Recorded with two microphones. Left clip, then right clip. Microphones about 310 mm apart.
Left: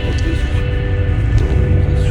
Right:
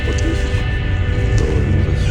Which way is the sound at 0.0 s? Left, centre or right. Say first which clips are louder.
Right 1 dB; centre.